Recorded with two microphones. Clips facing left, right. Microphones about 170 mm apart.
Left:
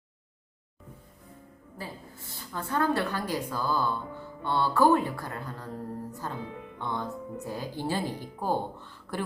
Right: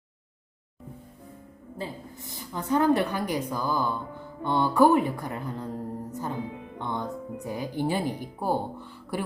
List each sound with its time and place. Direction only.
1.8 s a woman's voice: 20° right (ahead or behind)
6.1 s music: 20° right (ahead or behind)
6.7 s a woman's voice: 15° right (ahead or behind)